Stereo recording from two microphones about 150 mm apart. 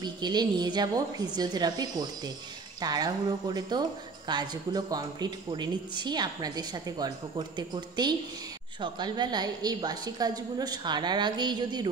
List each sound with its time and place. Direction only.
0.0 s speech: 30° right (ahead or behind)